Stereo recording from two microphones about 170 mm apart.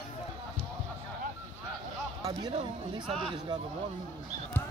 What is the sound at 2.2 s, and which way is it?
Speech, 30° right (ahead or behind).